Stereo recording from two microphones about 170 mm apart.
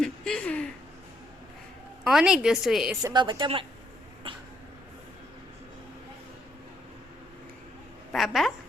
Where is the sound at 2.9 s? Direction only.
25° right (ahead or behind).